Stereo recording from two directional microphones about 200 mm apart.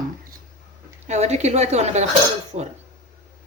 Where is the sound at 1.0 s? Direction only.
35° right (ahead or behind).